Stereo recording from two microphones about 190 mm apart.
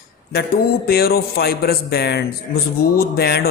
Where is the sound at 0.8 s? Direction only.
55° left (ahead or behind).